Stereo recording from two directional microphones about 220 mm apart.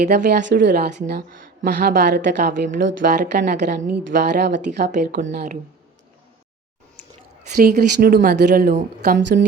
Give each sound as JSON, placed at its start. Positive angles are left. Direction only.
{"t": 0.0, "sound": "a woman's voice", "side_deg": -45}
{"t": 2.5, "sound": "a woman's voice", "side_deg": -35}
{"t": 7.5, "sound": "a woman's voice", "side_deg": -45}